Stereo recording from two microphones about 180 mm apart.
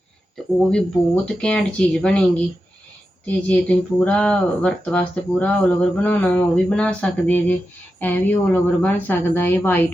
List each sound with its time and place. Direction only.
0.7 s speech: 5° left (ahead or behind)
3.2 s speech: 5° left (ahead or behind)